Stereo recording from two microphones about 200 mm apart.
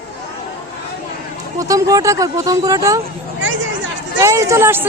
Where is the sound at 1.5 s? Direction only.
15° right (ahead or behind).